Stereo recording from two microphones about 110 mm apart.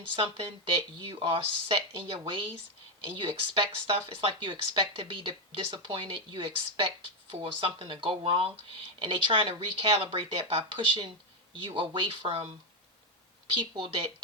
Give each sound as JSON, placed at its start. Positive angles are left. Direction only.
{"t": 0.2, "sound": "speech", "side_deg": -55}
{"t": 13.5, "sound": "speech", "side_deg": -50}